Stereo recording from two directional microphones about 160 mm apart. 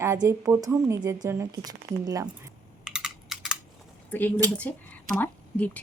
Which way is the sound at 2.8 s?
5° right (ahead or behind).